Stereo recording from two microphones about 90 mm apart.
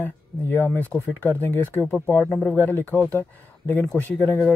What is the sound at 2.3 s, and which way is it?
Speech, 10° left (ahead or behind).